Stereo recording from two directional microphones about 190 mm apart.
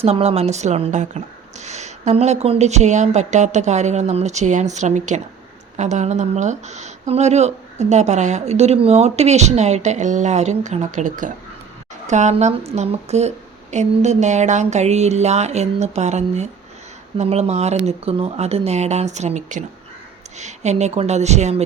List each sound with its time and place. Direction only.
0.0 s speech: 30° right (ahead or behind)